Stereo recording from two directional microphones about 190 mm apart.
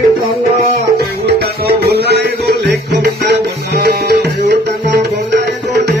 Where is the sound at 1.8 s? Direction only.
60° right (ahead or behind).